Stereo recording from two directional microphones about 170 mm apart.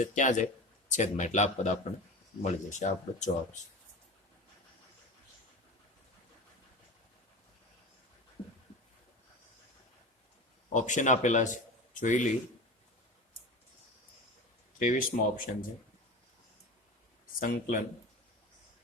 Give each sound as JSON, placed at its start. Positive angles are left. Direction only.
{"t": 0.0, "sound": "speech", "side_deg": 45}
{"t": 10.8, "sound": "speech", "side_deg": 45}
{"t": 14.8, "sound": "speech", "side_deg": 55}
{"t": 17.4, "sound": "speech", "side_deg": 55}